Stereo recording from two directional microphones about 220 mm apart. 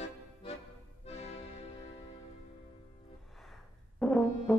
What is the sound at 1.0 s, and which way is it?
Music, 30° left (ahead or behind).